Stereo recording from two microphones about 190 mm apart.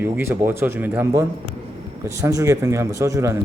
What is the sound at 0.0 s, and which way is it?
A man's voice, 10° right (ahead or behind).